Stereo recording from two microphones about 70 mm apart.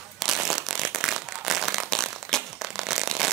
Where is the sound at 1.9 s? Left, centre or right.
Centre.